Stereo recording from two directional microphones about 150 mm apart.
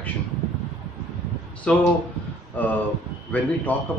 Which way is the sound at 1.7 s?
5° left (ahead or behind).